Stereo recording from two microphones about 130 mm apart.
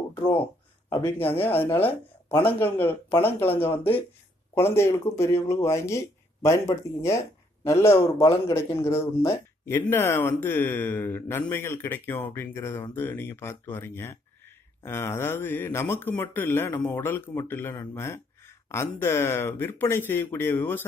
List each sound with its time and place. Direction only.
0.8 s speech: 15° left (ahead or behind)
4.6 s speech: 20° left (ahead or behind)